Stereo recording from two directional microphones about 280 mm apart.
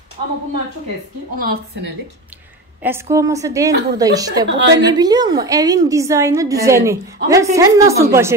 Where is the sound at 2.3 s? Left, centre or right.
Centre.